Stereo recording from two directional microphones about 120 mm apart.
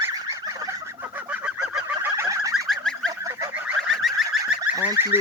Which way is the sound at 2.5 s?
5° left (ahead or behind).